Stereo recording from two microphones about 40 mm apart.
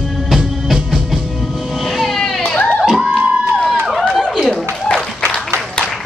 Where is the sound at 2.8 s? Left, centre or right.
Centre.